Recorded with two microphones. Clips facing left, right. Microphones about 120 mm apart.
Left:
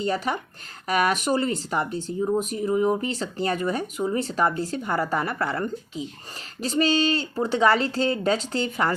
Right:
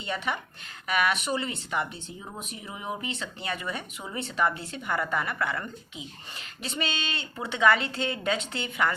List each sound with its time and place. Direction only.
0.0 s speech: 40° left (ahead or behind)